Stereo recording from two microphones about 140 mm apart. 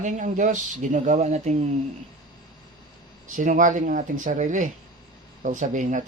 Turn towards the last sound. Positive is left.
turn(degrees=-65)  # may be behind; listen again after turning